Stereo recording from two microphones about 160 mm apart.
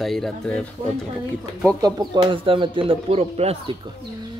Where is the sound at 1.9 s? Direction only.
35° right (ahead or behind).